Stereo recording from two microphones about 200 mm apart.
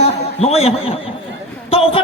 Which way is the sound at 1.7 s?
30° left (ahead or behind).